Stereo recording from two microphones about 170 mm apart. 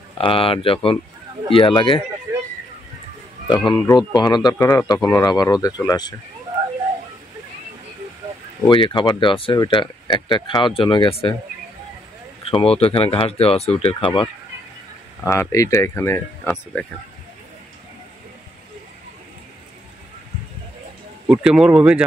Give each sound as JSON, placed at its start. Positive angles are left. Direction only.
{"t": 0.2, "sound": "speech", "side_deg": 30}
{"t": 3.4, "sound": "speech", "side_deg": 25}
{"t": 8.6, "sound": "speech", "side_deg": 30}
{"t": 12.4, "sound": "speech", "side_deg": 35}
{"t": 15.2, "sound": "speech", "side_deg": 15}
{"t": 21.3, "sound": "speech", "side_deg": -5}